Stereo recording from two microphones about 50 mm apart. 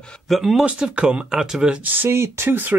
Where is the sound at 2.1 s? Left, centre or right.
Right.